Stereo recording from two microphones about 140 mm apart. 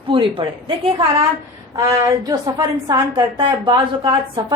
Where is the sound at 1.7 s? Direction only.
20° right (ahead or behind).